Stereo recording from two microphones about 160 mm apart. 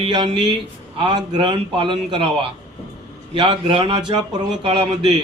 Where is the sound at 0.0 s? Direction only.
30° right (ahead or behind).